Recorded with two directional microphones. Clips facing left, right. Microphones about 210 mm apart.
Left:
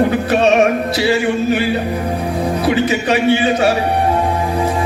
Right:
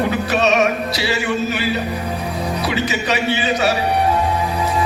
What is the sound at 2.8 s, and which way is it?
Speech, 50° left (ahead or behind).